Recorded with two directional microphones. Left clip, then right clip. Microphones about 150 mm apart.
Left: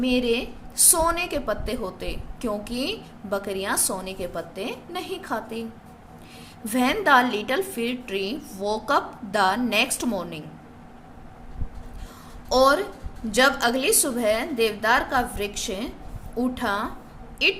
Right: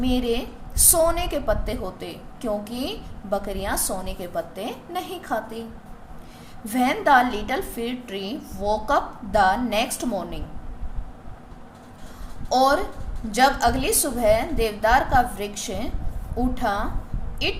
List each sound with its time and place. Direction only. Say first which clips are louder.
0.0 s a woman's voice: left 1 dB; 25° left (ahead or behind)
6.7 s a woman's voice: right 1 dB; 35° left (ahead or behind)
12.5 s a woman's voice: even; 30° left (ahead or behind)